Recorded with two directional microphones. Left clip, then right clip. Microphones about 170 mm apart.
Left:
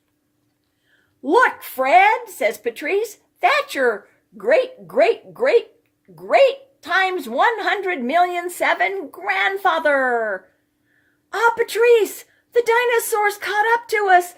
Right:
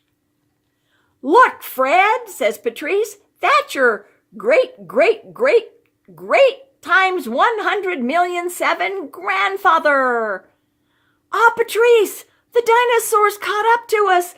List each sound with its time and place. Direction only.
1.2 s a woman's voice: 40° right (ahead or behind)